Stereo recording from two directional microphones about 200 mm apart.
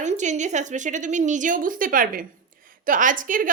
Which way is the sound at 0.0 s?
35° right (ahead or behind).